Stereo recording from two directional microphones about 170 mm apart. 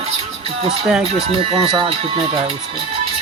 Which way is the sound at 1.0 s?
35° right (ahead or behind).